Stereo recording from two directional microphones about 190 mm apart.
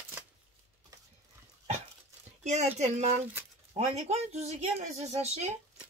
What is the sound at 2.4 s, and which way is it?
Speech, 35° right (ahead or behind).